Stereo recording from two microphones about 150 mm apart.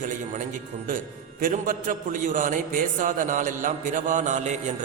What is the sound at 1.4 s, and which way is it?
A man's voice, 60° right (ahead or behind).